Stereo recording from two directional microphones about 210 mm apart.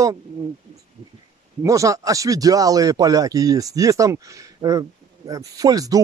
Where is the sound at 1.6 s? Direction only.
15° right (ahead or behind).